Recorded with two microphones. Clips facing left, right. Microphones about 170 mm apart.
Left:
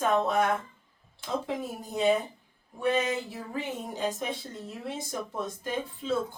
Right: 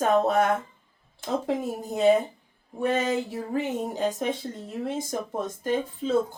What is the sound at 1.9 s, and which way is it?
Speech, 40° right (ahead or behind).